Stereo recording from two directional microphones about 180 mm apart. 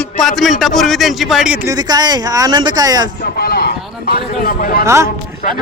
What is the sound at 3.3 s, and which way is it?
Speech, 60° left (ahead or behind).